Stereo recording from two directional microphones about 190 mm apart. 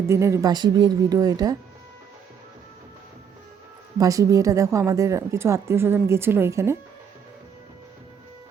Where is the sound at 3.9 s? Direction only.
20° right (ahead or behind).